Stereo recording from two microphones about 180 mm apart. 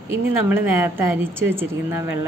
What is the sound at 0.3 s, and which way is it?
Speech, 10° right (ahead or behind).